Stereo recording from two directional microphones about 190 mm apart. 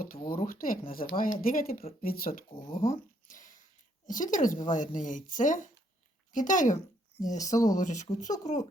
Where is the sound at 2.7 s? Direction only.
45° left (ahead or behind).